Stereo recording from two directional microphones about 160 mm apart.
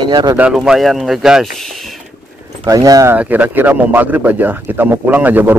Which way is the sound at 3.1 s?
10° right (ahead or behind).